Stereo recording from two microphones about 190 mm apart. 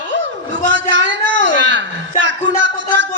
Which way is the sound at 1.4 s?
70° right (ahead or behind).